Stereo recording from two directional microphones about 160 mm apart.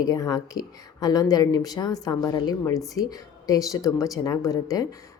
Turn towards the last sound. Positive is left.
turn(degrees=20)  # may be behind; listen again after turning